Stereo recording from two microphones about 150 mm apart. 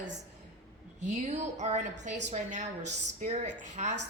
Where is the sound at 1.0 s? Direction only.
50° right (ahead or behind).